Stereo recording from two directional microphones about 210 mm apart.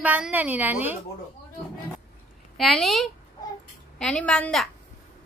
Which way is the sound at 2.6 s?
Centre (ahead or behind).